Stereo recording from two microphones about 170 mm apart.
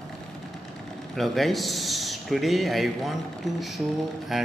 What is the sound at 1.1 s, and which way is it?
Speech, centre (ahead or behind).